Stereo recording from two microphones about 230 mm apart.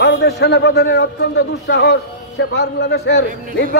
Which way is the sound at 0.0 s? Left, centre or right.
Left.